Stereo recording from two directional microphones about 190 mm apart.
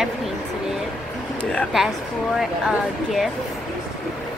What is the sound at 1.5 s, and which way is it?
Speech, centre (ahead or behind).